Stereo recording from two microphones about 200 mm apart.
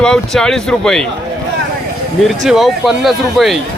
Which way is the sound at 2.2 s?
Centre (ahead or behind).